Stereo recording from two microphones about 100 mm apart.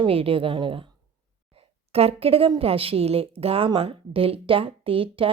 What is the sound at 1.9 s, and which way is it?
A woman's voice, 90° right.